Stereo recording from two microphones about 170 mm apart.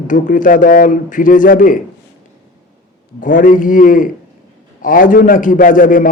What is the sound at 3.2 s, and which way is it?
Speech, 50° left (ahead or behind).